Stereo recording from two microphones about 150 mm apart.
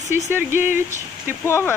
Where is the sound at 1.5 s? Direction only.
15° left (ahead or behind).